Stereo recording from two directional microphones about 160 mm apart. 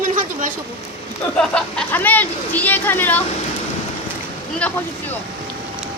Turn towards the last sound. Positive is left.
turn(degrees=10)  # may be behind; listen again after turning